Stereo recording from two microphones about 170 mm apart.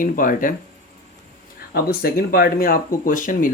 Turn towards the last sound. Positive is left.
turn(degrees=50)  # may be behind; listen again after turning